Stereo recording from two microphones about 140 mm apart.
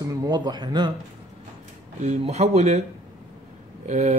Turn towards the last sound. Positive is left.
turn(degrees=-55)  # may be behind; listen again after turning